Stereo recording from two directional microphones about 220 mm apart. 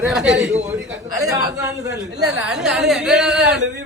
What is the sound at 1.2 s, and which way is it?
Speech, 15° right (ahead or behind).